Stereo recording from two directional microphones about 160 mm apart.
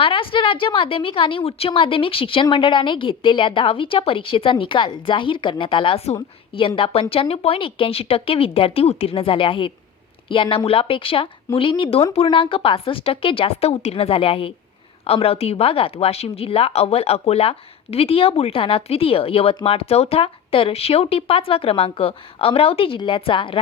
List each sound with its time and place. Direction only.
0.0 s a woman's voice: 35° left (ahead or behind)